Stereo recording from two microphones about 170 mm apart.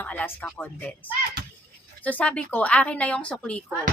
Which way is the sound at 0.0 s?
10° left (ahead or behind).